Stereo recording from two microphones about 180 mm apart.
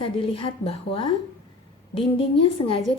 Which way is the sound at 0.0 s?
30° left (ahead or behind).